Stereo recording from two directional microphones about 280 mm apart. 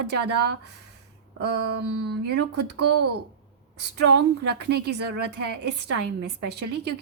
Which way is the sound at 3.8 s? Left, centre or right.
Right.